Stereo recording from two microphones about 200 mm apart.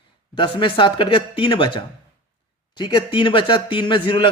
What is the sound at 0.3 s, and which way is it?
Speech, 25° left (ahead or behind).